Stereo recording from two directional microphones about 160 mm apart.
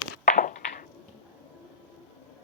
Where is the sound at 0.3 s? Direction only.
50° left (ahead or behind).